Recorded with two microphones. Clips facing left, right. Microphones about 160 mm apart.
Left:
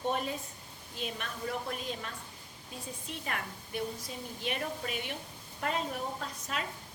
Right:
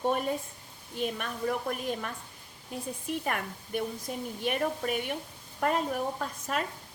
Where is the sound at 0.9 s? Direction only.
50° right (ahead or behind).